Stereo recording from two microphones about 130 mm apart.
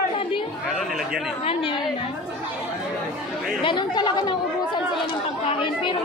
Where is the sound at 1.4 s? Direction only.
45° left (ahead or behind).